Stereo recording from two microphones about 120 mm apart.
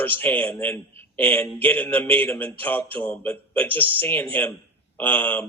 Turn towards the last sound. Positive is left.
turn(degrees=15)  # may be behind; listen again after turning